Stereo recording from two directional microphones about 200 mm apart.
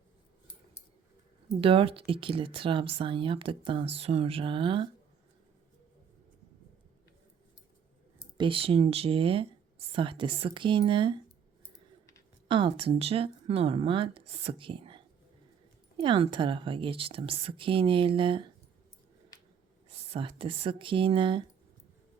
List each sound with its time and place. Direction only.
1.6 s speech: 25° right (ahead or behind)
8.4 s speech: 25° right (ahead or behind)
12.5 s speech: 25° right (ahead or behind)
19.9 s speech: 30° right (ahead or behind)